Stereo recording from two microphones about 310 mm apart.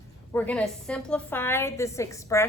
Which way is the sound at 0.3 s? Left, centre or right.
Centre.